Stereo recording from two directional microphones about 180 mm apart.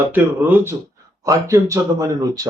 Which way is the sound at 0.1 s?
10° right (ahead or behind).